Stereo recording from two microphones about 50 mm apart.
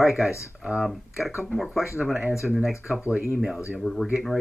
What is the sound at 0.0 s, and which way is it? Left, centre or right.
Speech, centre.